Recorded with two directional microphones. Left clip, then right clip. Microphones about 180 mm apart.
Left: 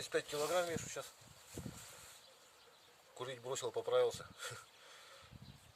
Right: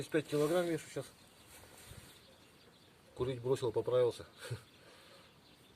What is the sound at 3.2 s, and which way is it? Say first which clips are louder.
Speech: right 7 dB; 15° left (ahead or behind).